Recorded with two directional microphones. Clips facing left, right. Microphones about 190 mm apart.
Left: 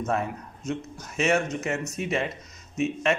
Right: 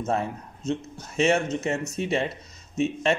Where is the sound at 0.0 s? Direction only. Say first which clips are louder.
Right 1 dB; 30° right (ahead or behind).